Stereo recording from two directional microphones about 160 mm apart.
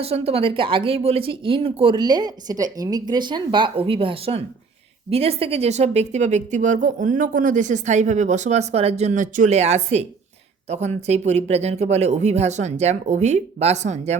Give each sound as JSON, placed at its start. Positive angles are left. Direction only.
{"t": 0.0, "sound": "speech", "side_deg": -40}